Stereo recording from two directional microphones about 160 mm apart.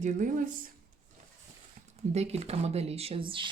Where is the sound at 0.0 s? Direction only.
50° right (ahead or behind).